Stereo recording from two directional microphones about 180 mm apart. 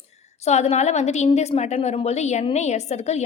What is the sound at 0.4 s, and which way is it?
A woman's voice, 40° left (ahead or behind).